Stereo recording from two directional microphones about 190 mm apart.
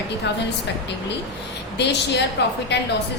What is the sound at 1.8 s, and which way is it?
Speech, 65° left (ahead or behind).